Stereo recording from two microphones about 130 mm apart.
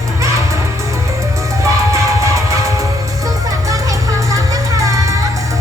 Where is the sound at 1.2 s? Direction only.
25° right (ahead or behind).